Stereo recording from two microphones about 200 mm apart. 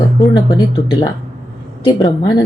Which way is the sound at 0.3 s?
20° left (ahead or behind).